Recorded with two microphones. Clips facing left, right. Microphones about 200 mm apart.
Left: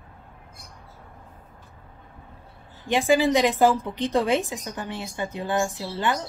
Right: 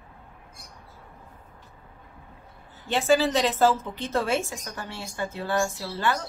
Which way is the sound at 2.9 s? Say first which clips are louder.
Left 2 dB; 15° left (ahead or behind).